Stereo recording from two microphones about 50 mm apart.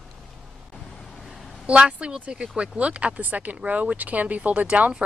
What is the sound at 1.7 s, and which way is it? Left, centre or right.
Speech, centre.